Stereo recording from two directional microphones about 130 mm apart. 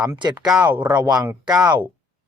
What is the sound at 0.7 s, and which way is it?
Speech, 15° right (ahead or behind).